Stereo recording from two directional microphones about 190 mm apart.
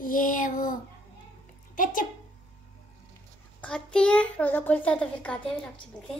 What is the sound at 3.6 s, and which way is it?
A child's voice, 5° left (ahead or behind).